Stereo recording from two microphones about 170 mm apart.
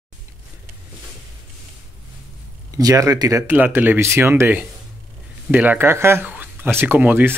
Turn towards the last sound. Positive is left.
turn(degrees=-10)  # may be behind; listen again after turning